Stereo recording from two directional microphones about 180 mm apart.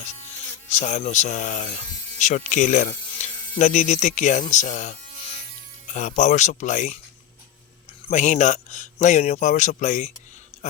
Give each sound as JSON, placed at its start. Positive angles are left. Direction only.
{"t": 0.7, "sound": "a man's voice", "side_deg": 40}
{"t": 2.1, "sound": "insect", "side_deg": 40}
{"t": 3.6, "sound": "a man's voice", "side_deg": 40}
{"t": 8.0, "sound": "a man's voice", "side_deg": 40}